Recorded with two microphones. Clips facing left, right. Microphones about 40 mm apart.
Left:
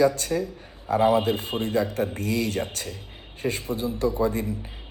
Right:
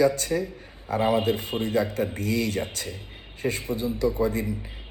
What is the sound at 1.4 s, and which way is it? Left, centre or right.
Speech, left.